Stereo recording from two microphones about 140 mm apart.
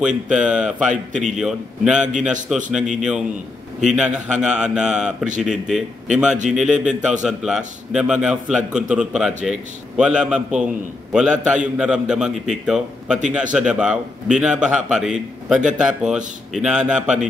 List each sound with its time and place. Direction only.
0.0 s a man's voice: 5° right (ahead or behind)
0.7 s a man's voice: 60° right (ahead or behind)
1.4 s a man's voice: 5° right (ahead or behind)
3.9 s a man's voice: 5° right (ahead or behind)